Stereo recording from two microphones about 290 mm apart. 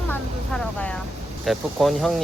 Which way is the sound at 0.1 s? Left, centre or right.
Centre.